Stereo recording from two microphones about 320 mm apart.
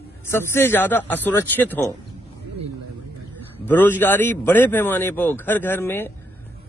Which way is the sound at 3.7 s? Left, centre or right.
Centre.